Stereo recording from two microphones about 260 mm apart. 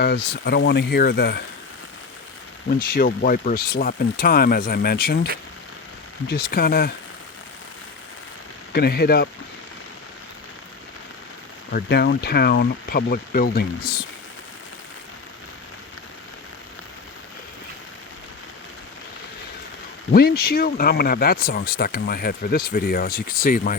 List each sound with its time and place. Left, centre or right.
0.0 s speech: left
2.6 s speech: left
6.2 s speech: left
8.7 s speech: left
11.7 s speech: left
20.1 s speech: left